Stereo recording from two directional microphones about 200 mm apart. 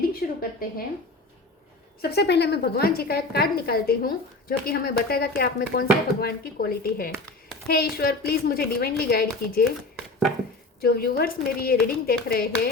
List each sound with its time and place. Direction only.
0.2 s a sound: 45° left (ahead or behind)
2.0 s a woman's voice: 55° left (ahead or behind)
10.8 s a woman's voice: 50° left (ahead or behind)